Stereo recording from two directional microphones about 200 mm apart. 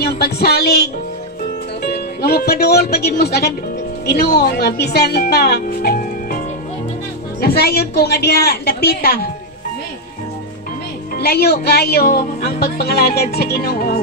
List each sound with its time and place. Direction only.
0.0 s speech: 50° left (ahead or behind)
1.9 s speech: 50° left (ahead or behind)
11.1 s speech: 50° left (ahead or behind)